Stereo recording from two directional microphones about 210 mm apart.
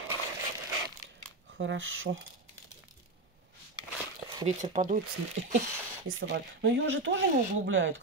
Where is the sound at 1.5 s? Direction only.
65° right (ahead or behind).